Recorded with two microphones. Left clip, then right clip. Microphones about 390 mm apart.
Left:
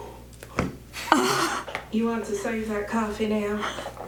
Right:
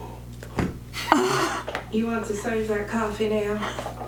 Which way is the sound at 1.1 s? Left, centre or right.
Centre.